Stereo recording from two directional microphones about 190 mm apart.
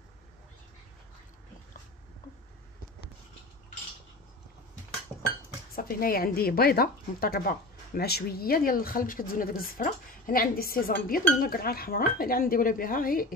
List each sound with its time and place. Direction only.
5.8 s speech: 50° left (ahead or behind)